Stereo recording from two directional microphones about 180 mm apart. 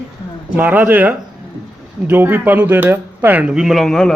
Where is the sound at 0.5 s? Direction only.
10° right (ahead or behind).